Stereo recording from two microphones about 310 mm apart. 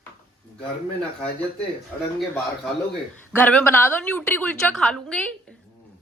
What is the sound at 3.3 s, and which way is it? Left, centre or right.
A woman's voice, centre.